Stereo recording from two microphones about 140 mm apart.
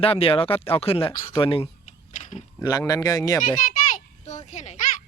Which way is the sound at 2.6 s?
25° left (ahead or behind).